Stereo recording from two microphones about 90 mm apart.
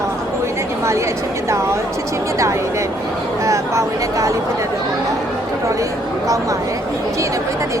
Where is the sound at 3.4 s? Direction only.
35° right (ahead or behind).